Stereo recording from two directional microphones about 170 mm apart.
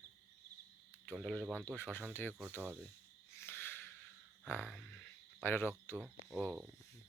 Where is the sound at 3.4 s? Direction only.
15° left (ahead or behind).